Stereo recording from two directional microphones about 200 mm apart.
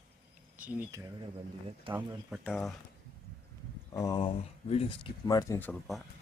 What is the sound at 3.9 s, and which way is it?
Speech, 15° left (ahead or behind).